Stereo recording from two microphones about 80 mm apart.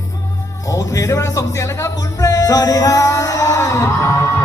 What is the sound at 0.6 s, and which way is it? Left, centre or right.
Music, left.